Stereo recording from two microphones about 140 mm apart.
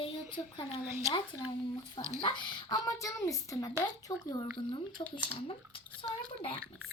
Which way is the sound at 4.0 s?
25° left (ahead or behind).